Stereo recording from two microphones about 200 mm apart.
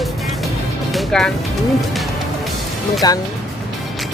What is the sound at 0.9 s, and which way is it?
Music, centre (ahead or behind).